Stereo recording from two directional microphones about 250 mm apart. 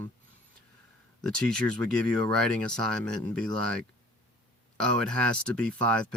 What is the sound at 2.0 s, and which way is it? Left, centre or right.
Speech, centre.